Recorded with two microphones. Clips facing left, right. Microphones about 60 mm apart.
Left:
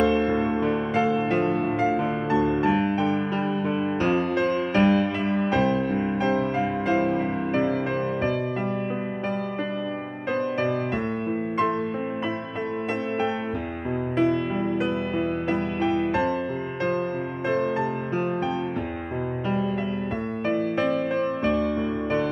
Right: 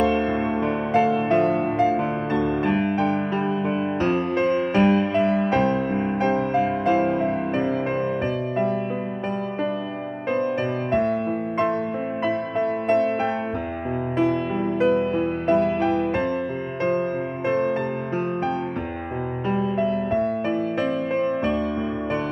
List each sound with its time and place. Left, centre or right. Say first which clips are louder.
0.0 s music: even; right
0.9 s music: right 6 dB; right
2.3 s music: left 1 dB; centre
2.6 s music: right 1 dB; right
5.1 s music: right 4 dB; right
14.1 s music: right 1 dB; right
17.5 s music: right 2 dB; right
21.1 s music: right 1 dB; centre